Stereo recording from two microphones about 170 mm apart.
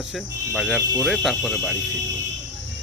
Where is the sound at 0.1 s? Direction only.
Centre (ahead or behind).